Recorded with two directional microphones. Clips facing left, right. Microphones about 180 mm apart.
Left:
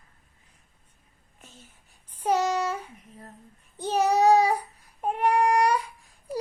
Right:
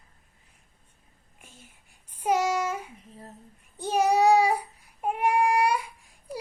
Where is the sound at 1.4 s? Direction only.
10° right (ahead or behind).